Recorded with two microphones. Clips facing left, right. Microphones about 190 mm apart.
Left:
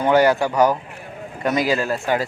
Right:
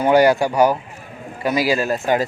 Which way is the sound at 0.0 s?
10° right (ahead or behind).